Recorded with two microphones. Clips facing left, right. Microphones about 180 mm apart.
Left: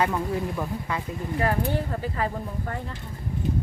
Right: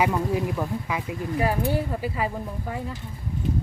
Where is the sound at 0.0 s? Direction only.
10° right (ahead or behind).